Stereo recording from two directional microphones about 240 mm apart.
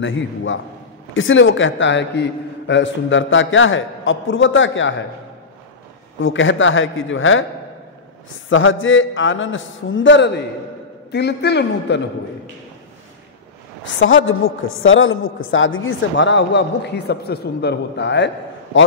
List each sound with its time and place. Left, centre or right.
0.0 s a woman's voice: left
6.2 s a woman's voice: left
8.5 s a woman's voice: left
13.9 s a woman's voice: left